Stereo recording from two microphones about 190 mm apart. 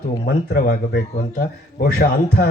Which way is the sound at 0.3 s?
55° left (ahead or behind).